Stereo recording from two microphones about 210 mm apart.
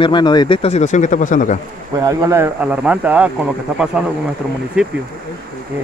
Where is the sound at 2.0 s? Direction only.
15° right (ahead or behind).